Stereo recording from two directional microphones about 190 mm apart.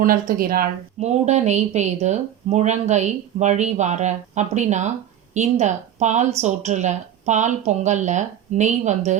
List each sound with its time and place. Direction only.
0.0 s speech: 50° right (ahead or behind)
0.9 s a woman's voice: 35° right (ahead or behind)